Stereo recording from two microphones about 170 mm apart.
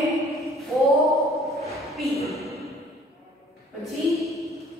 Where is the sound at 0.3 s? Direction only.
Centre (ahead or behind).